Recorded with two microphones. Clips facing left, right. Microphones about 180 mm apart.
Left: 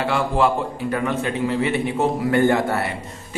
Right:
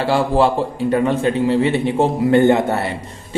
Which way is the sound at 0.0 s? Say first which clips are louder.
Right 4 dB; 30° right (ahead or behind).